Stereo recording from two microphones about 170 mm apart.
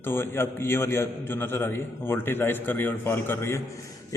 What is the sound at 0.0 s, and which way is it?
A man's voice, 15° left (ahead or behind).